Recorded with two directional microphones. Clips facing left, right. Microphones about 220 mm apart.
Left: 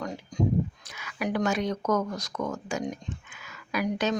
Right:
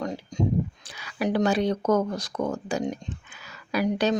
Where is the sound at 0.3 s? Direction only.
25° right (ahead or behind).